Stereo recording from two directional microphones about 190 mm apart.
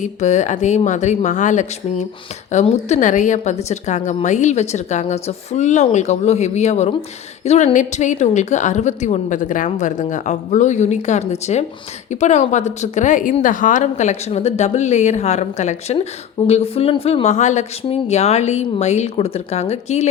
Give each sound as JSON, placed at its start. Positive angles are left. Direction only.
{"t": 0.0, "sound": "a woman's voice", "side_deg": 40}